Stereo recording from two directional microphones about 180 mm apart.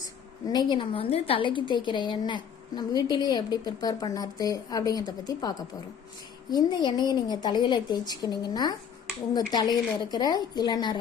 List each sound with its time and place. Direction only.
0.4 s a woman's voice: 25° left (ahead or behind)